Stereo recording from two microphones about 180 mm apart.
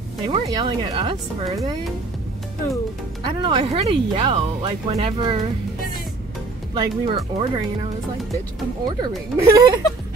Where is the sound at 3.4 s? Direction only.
30° right (ahead or behind).